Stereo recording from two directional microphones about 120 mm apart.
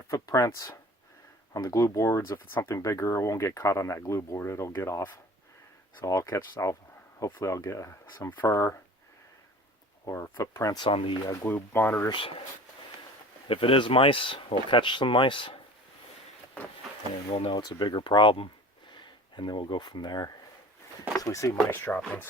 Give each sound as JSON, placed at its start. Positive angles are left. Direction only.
{"t": 0.1, "sound": "speech", "side_deg": 25}
{"t": 10.1, "sound": "speech", "side_deg": 25}
{"t": 10.8, "sound": "speech", "side_deg": 45}
{"t": 11.4, "sound": "speech", "side_deg": 15}
{"t": 12.1, "sound": "speech", "side_deg": 50}
{"t": 13.5, "sound": "speech", "side_deg": 45}
{"t": 17.3, "sound": "speech", "side_deg": 50}
{"t": 17.6, "sound": "speech", "side_deg": 35}
{"t": 21.7, "sound": "speech", "side_deg": 15}